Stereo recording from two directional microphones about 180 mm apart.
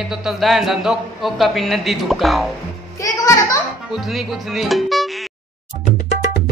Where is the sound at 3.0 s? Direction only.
20° left (ahead or behind).